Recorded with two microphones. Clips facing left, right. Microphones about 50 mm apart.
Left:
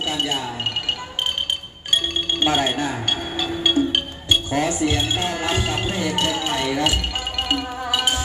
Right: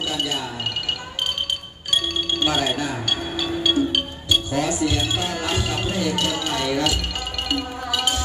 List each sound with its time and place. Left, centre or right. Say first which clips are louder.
0.1 s speech: left 2 dB; left
2.4 s speech: left 3 dB; left
7.4 s music: left 2 dB; left